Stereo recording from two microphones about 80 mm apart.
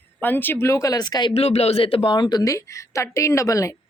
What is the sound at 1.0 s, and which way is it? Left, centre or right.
Speech, left.